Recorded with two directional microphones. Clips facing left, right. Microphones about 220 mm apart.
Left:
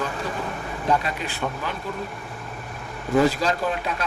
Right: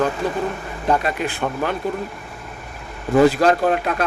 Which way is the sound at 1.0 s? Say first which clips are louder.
Right 5 dB; 55° right (ahead or behind).